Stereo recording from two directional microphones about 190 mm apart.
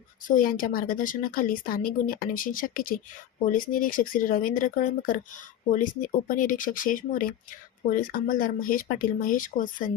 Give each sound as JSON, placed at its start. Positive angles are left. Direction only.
{"t": 0.3, "sound": "a woman's voice", "side_deg": 45}
{"t": 6.2, "sound": "a woman's voice", "side_deg": 45}